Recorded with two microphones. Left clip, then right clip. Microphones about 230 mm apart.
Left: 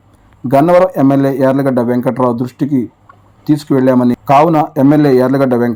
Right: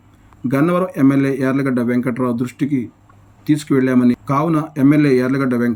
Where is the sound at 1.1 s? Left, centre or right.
Centre.